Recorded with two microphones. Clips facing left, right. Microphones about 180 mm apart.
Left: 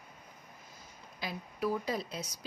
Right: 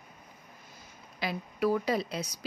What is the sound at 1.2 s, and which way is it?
Speech, 75° right (ahead or behind).